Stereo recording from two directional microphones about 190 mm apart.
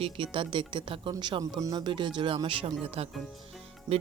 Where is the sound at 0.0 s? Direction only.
25° right (ahead or behind).